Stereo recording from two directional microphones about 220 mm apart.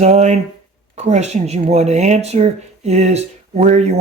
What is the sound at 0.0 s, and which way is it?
Speech, 30° right (ahead or behind).